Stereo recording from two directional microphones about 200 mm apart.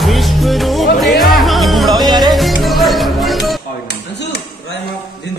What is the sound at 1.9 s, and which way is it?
Music, 20° right (ahead or behind).